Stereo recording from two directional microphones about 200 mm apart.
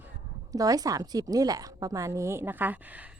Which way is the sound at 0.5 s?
15° right (ahead or behind).